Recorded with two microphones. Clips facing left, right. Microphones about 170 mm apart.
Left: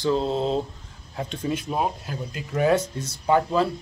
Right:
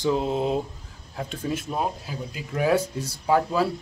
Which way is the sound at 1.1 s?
5° right (ahead or behind).